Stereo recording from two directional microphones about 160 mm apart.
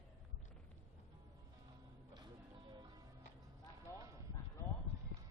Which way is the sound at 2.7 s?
25° right (ahead or behind).